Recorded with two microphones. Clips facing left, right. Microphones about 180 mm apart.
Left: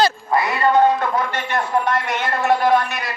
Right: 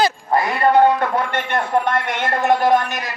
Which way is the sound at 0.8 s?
60° right (ahead or behind).